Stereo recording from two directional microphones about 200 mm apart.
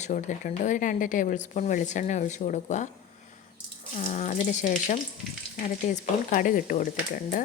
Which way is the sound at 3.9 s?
40° left (ahead or behind).